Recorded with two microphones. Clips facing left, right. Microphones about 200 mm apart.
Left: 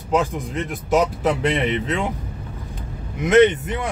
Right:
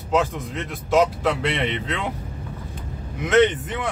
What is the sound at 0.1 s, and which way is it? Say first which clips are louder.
Speech: left 1 dB; 15° left (ahead or behind).